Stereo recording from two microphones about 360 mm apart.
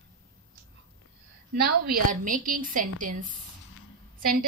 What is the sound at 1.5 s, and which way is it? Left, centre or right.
A woman's voice, right.